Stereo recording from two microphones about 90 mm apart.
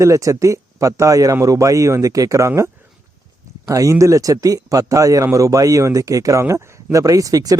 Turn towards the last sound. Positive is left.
turn(degrees=-40)  # may be behind; listen again after turning